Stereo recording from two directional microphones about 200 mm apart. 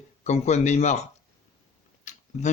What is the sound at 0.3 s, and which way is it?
Speech, 35° left (ahead or behind).